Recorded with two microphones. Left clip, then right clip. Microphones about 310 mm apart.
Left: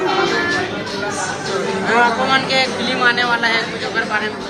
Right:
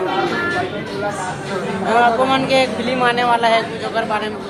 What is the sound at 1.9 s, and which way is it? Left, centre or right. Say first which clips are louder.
Speech: right 1 dB; centre.